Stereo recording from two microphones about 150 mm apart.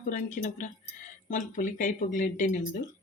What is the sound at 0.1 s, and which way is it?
Speech, 60° left (ahead or behind).